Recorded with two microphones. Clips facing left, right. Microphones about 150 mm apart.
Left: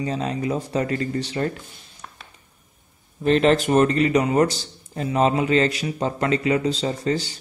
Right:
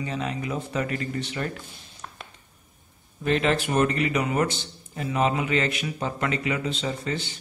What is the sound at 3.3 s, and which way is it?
Speech, 40° left (ahead or behind).